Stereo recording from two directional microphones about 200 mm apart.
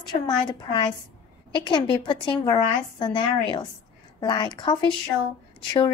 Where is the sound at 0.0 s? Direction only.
20° left (ahead or behind).